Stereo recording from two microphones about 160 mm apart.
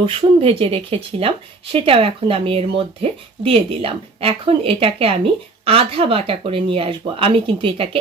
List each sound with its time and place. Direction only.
0.0 s speech: 35° right (ahead or behind)